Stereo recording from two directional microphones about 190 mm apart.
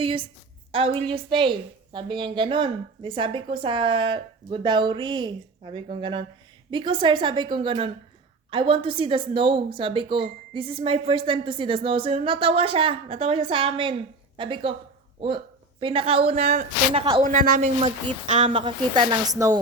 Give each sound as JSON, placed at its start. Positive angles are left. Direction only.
{"t": 0.0, "sound": "a woman's voice", "side_deg": -30}
{"t": 15.8, "sound": "speech", "side_deg": -30}
{"t": 16.9, "sound": "a woman's voice", "side_deg": -30}
{"t": 17.2, "sound": "a woman's voice", "side_deg": -50}
{"t": 17.6, "sound": "speech", "side_deg": -35}
{"t": 18.6, "sound": "a woman's voice", "side_deg": -20}